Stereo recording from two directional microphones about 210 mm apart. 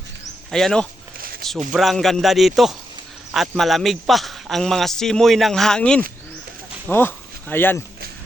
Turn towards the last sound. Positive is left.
turn(degrees=10)  # may be behind; listen again after turning